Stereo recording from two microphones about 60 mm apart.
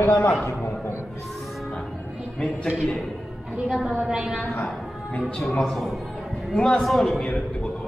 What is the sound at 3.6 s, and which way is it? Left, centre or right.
Speech, centre.